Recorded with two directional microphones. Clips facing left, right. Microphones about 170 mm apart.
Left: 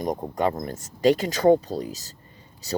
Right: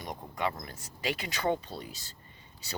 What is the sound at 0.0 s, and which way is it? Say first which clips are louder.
Speech: left 10 dB; 45° left (ahead or behind).